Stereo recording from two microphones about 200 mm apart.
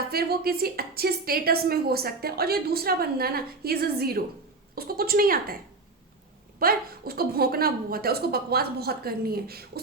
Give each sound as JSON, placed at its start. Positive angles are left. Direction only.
{"t": 0.1, "sound": "a woman's voice", "side_deg": -50}
{"t": 6.6, "sound": "a woman's voice", "side_deg": -45}